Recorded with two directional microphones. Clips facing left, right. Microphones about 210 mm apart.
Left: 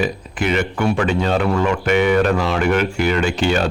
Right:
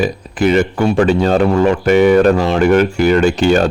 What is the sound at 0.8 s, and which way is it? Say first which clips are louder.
Speech: right 4 dB; 25° right (ahead or behind).